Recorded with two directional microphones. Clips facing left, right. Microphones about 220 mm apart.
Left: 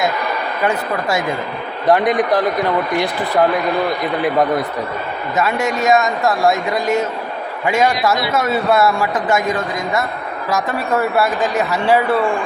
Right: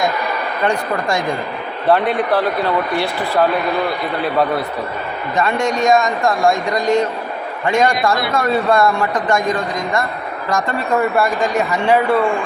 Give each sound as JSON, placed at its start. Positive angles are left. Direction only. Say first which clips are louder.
{"t": 0.6, "sound": "a man's voice", "louder": "right 1 dB", "side_deg": 5}
{"t": 4.2, "sound": "a man's voice", "louder": "left 1 dB", "side_deg": 15}
{"t": 5.4, "sound": "a man's voice", "louder": "right 1 dB", "side_deg": 5}